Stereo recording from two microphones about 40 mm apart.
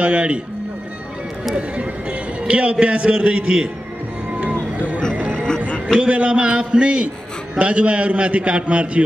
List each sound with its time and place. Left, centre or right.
0.0 s a man's voice: right
1.5 s a man's voice: right
4.4 s music: right
5.3 s music: centre
5.9 s a man's voice: right